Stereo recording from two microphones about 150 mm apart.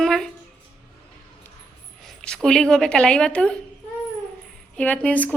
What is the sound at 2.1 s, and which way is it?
Speech, 5° left (ahead or behind).